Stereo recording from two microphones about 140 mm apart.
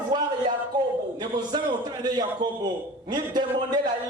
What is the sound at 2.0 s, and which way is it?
A man's voice, 30° right (ahead or behind).